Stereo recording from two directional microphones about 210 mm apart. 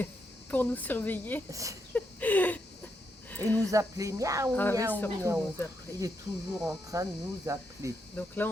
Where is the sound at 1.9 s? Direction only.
5° left (ahead or behind).